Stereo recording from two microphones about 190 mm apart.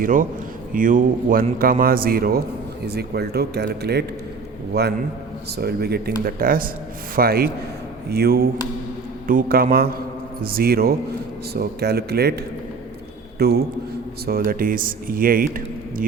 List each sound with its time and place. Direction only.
0.0 s speech: 45° right (ahead or behind)
13.4 s speech: 55° right (ahead or behind)